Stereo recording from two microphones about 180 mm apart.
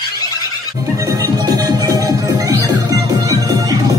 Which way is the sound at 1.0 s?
20° right (ahead or behind).